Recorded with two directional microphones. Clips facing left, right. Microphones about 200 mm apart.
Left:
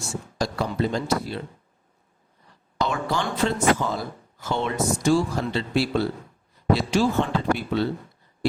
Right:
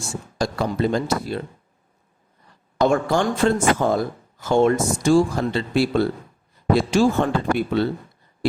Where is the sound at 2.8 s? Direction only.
50° right (ahead or behind).